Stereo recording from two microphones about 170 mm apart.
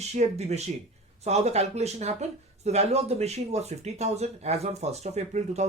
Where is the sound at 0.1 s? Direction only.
40° right (ahead or behind).